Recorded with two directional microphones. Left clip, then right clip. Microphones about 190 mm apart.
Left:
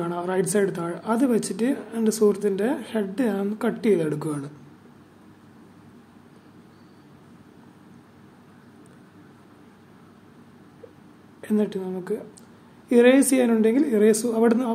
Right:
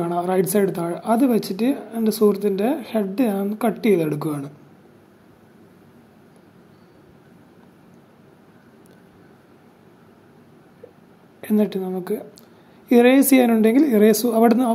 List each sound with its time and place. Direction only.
0.0 s speech: 20° right (ahead or behind)
11.4 s a woman's voice: 15° right (ahead or behind)